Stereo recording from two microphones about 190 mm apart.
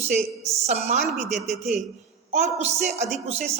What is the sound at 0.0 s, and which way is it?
A woman's voice, 35° right (ahead or behind).